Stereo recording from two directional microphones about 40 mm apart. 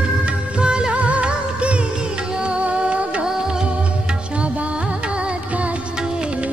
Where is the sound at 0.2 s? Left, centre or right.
Right.